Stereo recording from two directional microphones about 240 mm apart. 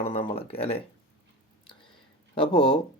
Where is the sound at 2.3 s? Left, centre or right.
Centre.